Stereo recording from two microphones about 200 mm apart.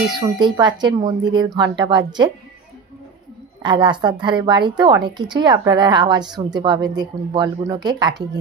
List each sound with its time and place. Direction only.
0.2 s a woman's voice: 20° right (ahead or behind)
3.6 s a woman's voice: 25° right (ahead or behind)